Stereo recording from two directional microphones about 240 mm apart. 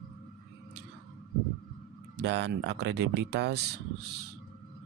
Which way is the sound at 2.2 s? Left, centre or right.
Right.